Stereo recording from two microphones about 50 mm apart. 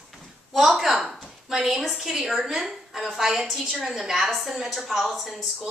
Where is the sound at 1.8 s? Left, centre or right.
Centre.